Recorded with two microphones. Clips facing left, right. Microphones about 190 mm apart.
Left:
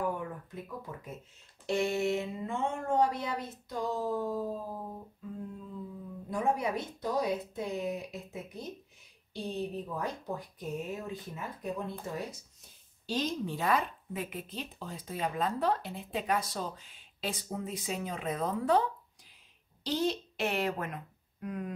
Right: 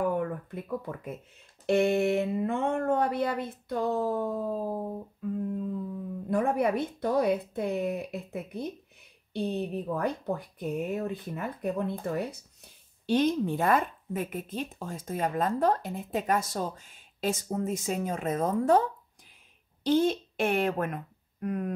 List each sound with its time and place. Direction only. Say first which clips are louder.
0.2 s a sound: right 7 dB; 60° right (ahead or behind)
1.7 s speech: right 6 dB; 60° right (ahead or behind)
5.5 s humming: right 12 dB; 55° right (ahead or behind)
6.3 s speech: right 5 dB; 60° right (ahead or behind)